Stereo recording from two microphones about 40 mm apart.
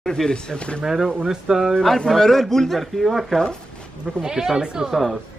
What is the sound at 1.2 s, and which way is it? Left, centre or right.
Speech, centre.